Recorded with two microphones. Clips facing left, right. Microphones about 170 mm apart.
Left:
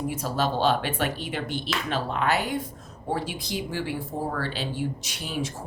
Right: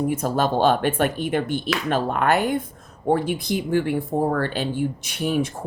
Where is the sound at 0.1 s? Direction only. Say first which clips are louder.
Right 5 dB; 50° right (ahead or behind).